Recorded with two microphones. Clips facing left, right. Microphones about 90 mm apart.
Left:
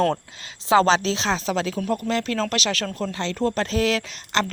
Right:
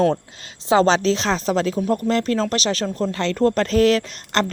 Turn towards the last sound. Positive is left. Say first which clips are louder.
# right 3 dB
turn(degrees=-45)  # may be behind; listen again after turning